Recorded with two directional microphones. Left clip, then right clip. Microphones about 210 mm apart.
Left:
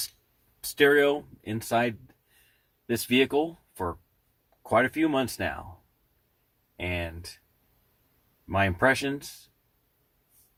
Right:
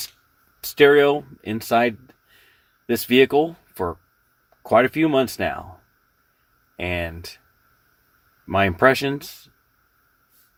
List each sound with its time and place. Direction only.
0.8 s speech: 45° right (ahead or behind)
6.7 s speech: 40° right (ahead or behind)
8.4 s speech: 40° right (ahead or behind)